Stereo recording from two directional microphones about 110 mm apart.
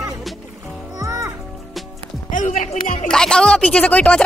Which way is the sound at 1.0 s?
30° right (ahead or behind).